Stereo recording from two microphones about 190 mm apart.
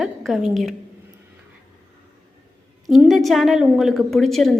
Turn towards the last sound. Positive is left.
turn(degrees=0)  # may be behind; listen again after turning